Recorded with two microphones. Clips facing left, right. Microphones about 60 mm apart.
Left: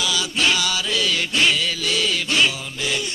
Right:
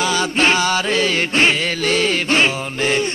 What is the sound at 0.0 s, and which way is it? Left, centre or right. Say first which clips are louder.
Music: right 5 dB; right.